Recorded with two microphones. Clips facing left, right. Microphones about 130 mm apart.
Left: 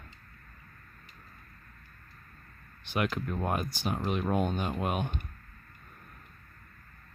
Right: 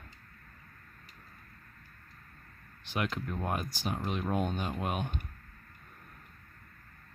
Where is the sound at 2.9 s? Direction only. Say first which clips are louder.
Left 3 dB; 70° left (ahead or behind).